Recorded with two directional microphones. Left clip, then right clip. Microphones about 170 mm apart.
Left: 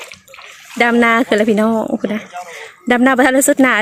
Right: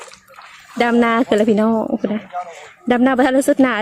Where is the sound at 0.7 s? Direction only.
Centre (ahead or behind).